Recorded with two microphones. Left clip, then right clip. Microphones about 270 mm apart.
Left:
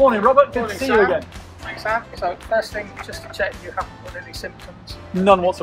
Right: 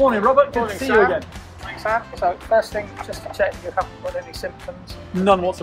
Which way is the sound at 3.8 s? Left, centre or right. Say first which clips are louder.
Right 4 dB; centre.